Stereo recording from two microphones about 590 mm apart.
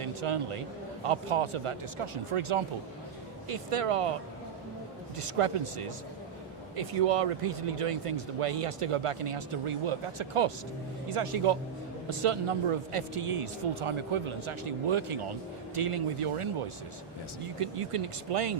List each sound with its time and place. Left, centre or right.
0.0 s a man's voice: right
5.2 s speech: right
17.6 s speech: right